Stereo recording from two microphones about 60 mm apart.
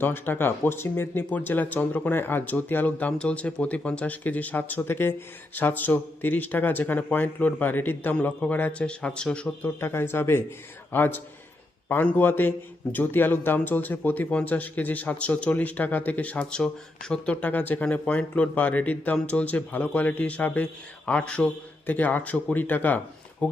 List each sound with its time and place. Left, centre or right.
0.0 s speech: left
1.3 s a man's voice: left
3.1 s a man's voice: centre; by 8.1 s left
8.1 s a man's voice: left
9.8 s a man's voice: left; by 17.3 s centre
17.4 s a man's voice: left
17.8 s a man's voice: centre
21.8 s a man's voice: left